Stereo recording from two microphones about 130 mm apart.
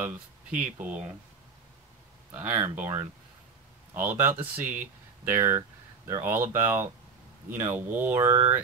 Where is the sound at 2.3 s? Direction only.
15° right (ahead or behind).